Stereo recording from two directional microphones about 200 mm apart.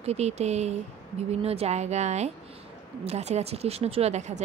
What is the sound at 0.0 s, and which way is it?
A woman's voice, 35° right (ahead or behind).